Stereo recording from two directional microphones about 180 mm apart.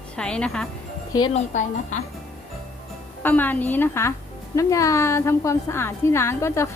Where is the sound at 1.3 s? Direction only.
40° left (ahead or behind).